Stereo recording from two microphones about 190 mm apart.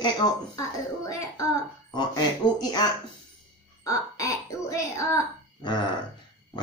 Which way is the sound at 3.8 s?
15° left (ahead or behind).